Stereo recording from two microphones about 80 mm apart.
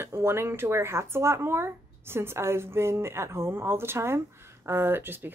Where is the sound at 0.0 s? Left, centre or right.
Right.